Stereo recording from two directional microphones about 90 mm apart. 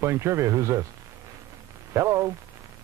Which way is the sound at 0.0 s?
30° right (ahead or behind).